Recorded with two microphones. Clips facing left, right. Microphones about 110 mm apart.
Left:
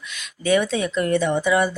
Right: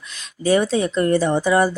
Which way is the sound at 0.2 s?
35° right (ahead or behind).